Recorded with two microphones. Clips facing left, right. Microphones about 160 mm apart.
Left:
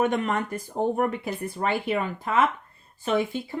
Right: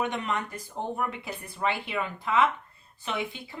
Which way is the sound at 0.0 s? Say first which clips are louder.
Left 6 dB; 50° left (ahead or behind).